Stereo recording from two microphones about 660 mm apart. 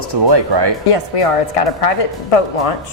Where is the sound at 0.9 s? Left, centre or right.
Left.